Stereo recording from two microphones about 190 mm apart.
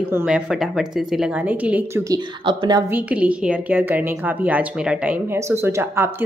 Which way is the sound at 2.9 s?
5° right (ahead or behind).